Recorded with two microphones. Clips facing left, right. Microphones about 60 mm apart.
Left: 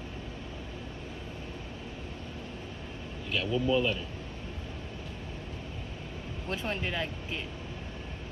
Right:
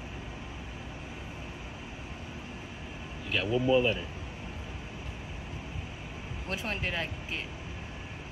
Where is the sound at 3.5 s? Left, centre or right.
Centre.